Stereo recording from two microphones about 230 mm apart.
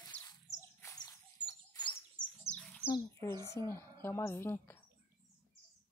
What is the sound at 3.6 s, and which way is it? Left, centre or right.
A woman's voice, centre.